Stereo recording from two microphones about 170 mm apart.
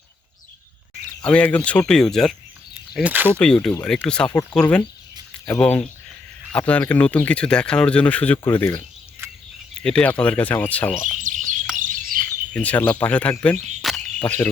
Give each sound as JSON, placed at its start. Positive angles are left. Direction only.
{"t": 1.2, "sound": "speech", "side_deg": 5}
{"t": 2.9, "sound": "speech", "side_deg": -10}
{"t": 3.3, "sound": "speech", "side_deg": 5}
{"t": 9.2, "sound": "cricket", "side_deg": -15}
{"t": 9.8, "sound": "speech", "side_deg": 5}
{"t": 11.2, "sound": "bird", "side_deg": -50}
{"t": 12.5, "sound": "speech", "side_deg": 10}
{"t": 13.8, "sound": "a sound", "side_deg": 0}
{"t": 14.2, "sound": "speech", "side_deg": 10}